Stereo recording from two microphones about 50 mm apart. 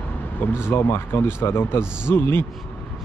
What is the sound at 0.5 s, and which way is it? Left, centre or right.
Speech, left.